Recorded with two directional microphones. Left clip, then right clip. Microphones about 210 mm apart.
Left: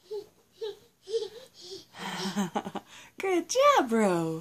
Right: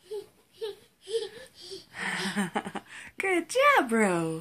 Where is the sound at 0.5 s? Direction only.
10° left (ahead or behind).